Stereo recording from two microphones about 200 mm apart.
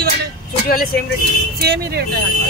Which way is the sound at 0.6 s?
45° left (ahead or behind).